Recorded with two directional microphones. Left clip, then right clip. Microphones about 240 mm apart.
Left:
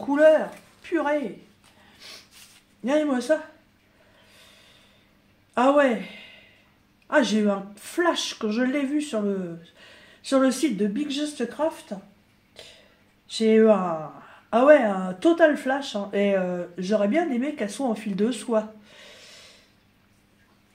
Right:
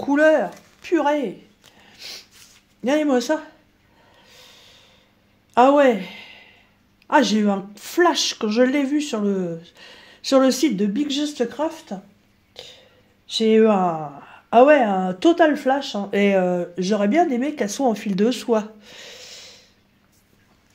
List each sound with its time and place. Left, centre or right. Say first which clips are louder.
0.0 s speech: right 1 dB; right
2.0 s a sound: right 7 dB; right
2.8 s speech: right 4 dB; right
5.5 s speech: right 5 dB; right
12.6 s a sound: right 6 dB; right
13.3 s speech: right 2 dB; right